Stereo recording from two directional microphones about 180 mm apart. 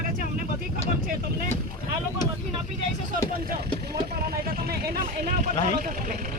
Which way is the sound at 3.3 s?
55° right (ahead or behind).